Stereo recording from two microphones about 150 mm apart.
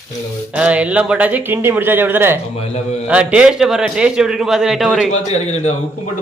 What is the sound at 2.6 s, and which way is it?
Speech, 45° left (ahead or behind).